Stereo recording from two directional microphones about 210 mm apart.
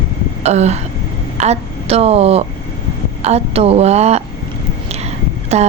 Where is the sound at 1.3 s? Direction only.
30° right (ahead or behind).